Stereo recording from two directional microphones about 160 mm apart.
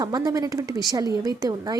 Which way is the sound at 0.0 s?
25° right (ahead or behind).